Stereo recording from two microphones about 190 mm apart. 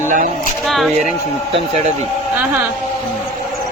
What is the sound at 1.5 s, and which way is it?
Speech, 35° right (ahead or behind).